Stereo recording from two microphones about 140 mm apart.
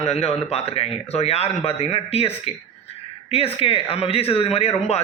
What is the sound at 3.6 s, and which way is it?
Speech, 45° left (ahead or behind).